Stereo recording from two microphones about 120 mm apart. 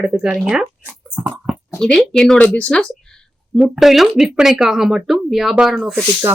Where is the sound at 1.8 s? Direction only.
5° left (ahead or behind).